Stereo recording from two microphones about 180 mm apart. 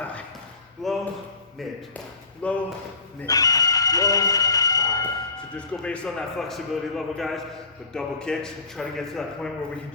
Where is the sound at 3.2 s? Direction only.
20° left (ahead or behind).